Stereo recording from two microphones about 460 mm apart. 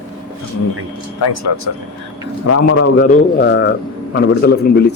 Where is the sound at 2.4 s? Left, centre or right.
Left.